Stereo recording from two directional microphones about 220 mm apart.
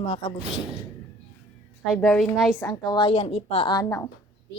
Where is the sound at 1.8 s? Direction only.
Centre (ahead or behind).